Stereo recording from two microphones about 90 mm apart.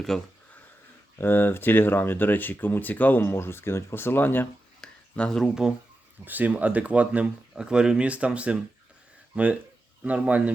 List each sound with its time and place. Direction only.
0.1 s speech: 5° left (ahead or behind)
1.2 s speech: 25° left (ahead or behind)
4.8 s a sound: 10° left (ahead or behind)
6.2 s speech: 20° right (ahead or behind)